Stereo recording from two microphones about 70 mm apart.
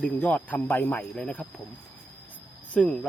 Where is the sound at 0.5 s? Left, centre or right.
Left.